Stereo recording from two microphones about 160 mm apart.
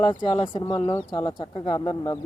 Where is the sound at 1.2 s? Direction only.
30° left (ahead or behind).